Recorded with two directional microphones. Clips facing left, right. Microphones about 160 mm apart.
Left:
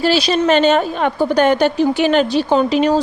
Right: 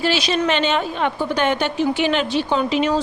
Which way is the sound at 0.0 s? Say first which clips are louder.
Left 5 dB; 35° left (ahead or behind).